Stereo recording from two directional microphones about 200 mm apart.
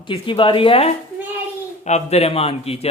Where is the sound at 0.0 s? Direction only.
25° left (ahead or behind).